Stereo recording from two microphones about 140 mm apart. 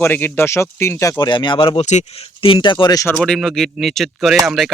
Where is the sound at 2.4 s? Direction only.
35° left (ahead or behind).